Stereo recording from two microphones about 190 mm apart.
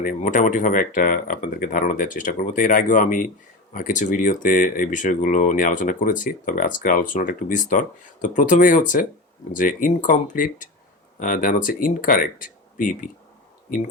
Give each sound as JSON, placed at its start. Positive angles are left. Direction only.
{"t": 0.0, "sound": "speech", "side_deg": 45}